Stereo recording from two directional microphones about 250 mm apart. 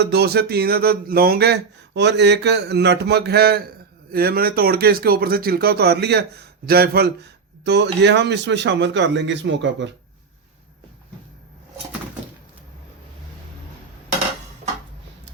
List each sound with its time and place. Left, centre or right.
0.0 s speech: right